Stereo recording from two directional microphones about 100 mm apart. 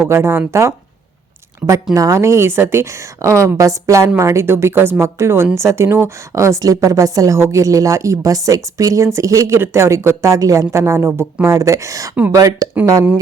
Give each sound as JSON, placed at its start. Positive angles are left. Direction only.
{"t": 0.1, "sound": "a woman's voice", "side_deg": -25}